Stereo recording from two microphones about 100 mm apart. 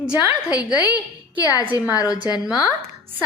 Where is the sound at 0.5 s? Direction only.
40° left (ahead or behind).